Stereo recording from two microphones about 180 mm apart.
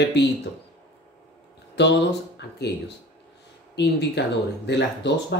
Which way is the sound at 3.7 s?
70° left (ahead or behind).